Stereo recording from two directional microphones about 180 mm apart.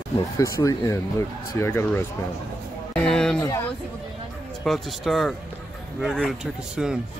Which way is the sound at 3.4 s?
15° left (ahead or behind).